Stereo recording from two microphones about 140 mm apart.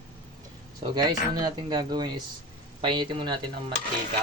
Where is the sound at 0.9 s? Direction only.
30° right (ahead or behind).